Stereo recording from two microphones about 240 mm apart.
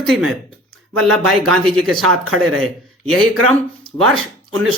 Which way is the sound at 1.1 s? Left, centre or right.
Right.